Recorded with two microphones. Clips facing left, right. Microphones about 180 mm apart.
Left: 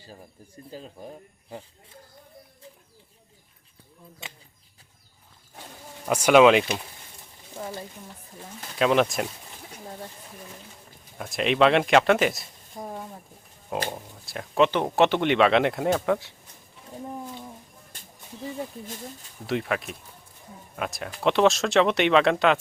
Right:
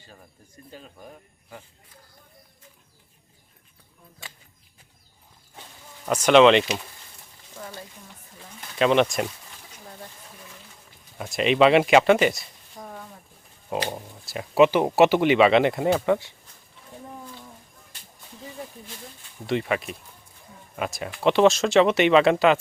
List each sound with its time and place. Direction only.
0.2 s speech: 30° left (ahead or behind)
4.2 s speech: 20° left (ahead or behind)
6.1 s speech: 10° left (ahead or behind)
8.8 s speech: centre (ahead or behind)
11.2 s speech: centre (ahead or behind)
12.7 s a sound: 25° left (ahead or behind)
13.9 s speech: centre (ahead or behind)
19.5 s speech: centre (ahead or behind)